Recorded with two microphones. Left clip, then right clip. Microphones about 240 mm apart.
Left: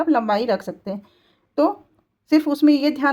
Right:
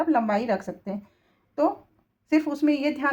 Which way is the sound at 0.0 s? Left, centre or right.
Left.